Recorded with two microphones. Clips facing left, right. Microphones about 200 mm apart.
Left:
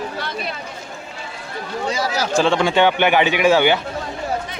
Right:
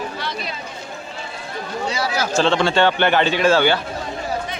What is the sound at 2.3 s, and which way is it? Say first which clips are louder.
A man's voice: left 1 dB; 10° left (ahead or behind).